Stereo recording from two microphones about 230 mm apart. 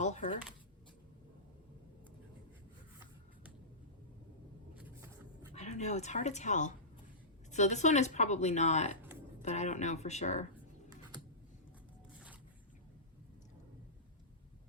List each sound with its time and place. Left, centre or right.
0.0 s a sound: left
4.8 s vehicle: centre
5.5 s speech: left